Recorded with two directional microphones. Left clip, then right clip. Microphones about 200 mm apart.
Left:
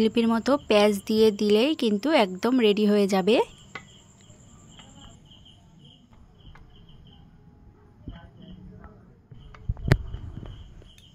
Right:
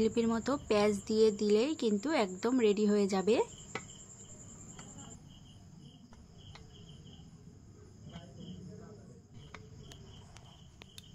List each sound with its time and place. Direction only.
0.0 s speech: 45° left (ahead or behind)